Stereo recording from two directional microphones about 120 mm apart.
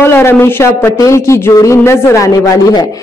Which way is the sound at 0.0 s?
20° left (ahead or behind).